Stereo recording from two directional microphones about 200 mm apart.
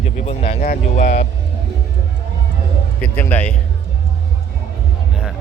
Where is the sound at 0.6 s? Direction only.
40° left (ahead or behind).